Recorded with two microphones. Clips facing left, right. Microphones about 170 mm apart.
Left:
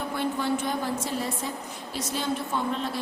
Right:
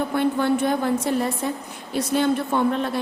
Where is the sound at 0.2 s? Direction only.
60° right (ahead or behind).